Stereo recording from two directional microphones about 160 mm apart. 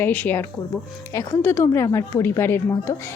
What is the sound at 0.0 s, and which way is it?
A woman's voice, 10° left (ahead or behind).